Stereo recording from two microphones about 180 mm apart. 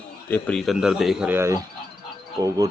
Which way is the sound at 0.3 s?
10° left (ahead or behind).